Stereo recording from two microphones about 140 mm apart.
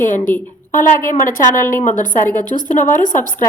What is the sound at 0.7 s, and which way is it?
A woman's voice, 75° left (ahead or behind).